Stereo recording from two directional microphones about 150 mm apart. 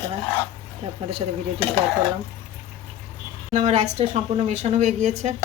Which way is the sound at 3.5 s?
50° right (ahead or behind).